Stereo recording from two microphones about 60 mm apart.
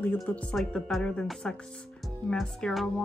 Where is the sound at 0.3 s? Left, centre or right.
Left.